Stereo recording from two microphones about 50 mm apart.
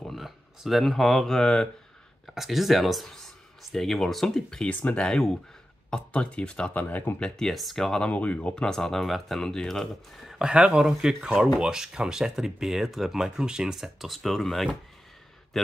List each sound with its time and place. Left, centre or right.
0.1 s speech: centre
2.2 s speech: centre
4.6 s speech: left
6.8 s speech: left
7.2 s speech: centre
8.1 s speech: left
8.7 s speech: centre
10.4 s a man's voice: centre